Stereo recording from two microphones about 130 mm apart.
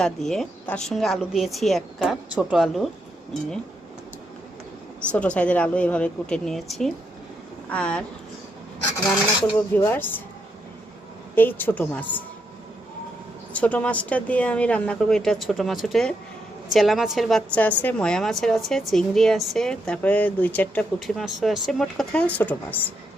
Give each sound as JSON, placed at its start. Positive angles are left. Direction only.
{"t": 0.0, "sound": "a woman's voice", "side_deg": 0}
{"t": 5.1, "sound": "speech", "side_deg": 10}
{"t": 9.6, "sound": "speech", "side_deg": 15}
{"t": 11.3, "sound": "speech", "side_deg": 15}
{"t": 13.5, "sound": "a woman's voice", "side_deg": 10}
{"t": 17.6, "sound": "a woman's voice", "side_deg": 10}
{"t": 21.2, "sound": "a woman's voice", "side_deg": 0}